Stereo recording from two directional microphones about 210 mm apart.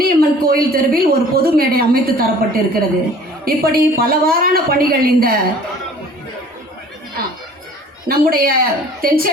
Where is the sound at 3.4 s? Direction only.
45° right (ahead or behind).